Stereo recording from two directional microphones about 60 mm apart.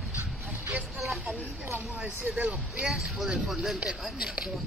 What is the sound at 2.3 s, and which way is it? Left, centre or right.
Speech, centre.